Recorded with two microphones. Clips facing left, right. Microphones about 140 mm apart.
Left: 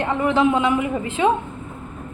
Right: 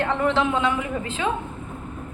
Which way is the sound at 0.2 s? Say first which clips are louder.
Left 7 dB; 5° left (ahead or behind).